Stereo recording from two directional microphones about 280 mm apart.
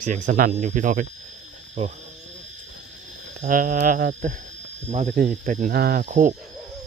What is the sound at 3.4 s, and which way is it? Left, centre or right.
Speech, right.